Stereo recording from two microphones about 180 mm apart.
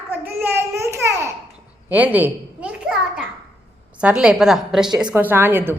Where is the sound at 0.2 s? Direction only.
10° right (ahead or behind).